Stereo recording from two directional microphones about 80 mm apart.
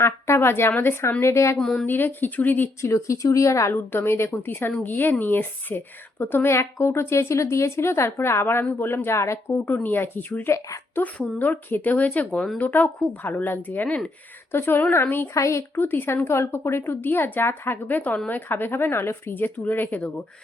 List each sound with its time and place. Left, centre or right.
0.0 s a woman's voice: left
1.5 s speech: centre
1.9 s a woman's voice: left
2.9 s a woman's voice: left
15.8 s a woman's voice: left